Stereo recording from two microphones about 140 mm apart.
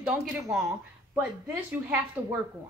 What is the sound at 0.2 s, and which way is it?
Speech, centre (ahead or behind).